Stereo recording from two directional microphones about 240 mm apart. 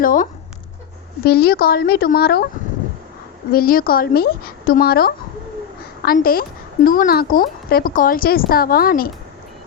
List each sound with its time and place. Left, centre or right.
0.0 s speech: left
3.5 s speech: left